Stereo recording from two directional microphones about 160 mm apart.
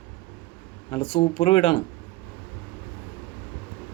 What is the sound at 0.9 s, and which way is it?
Speech, 35° left (ahead or behind).